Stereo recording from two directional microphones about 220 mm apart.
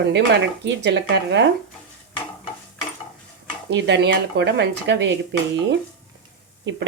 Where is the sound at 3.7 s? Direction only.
50° right (ahead or behind).